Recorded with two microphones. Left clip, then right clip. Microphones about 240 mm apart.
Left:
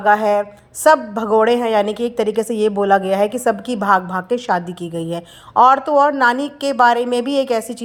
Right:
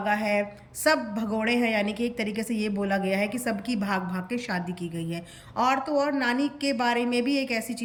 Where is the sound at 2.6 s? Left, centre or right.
Left.